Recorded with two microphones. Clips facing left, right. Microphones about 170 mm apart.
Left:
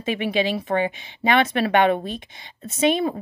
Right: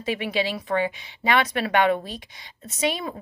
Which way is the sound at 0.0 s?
20° left (ahead or behind).